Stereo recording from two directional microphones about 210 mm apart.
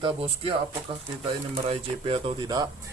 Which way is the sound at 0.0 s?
25° right (ahead or behind).